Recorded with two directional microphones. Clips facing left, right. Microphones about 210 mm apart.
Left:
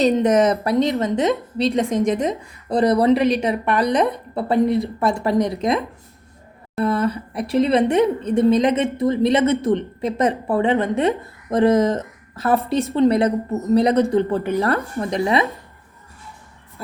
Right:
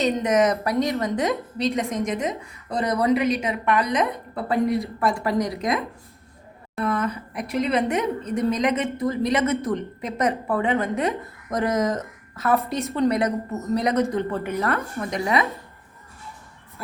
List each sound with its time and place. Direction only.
0.0 s a woman's voice: 30° left (ahead or behind)
6.7 s a woman's voice: 30° left (ahead or behind)